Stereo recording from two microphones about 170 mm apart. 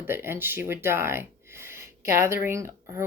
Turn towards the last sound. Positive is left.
turn(degrees=-15)  # may be behind; listen again after turning